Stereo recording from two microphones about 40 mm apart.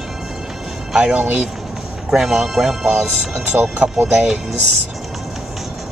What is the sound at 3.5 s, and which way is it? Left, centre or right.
Speech, right.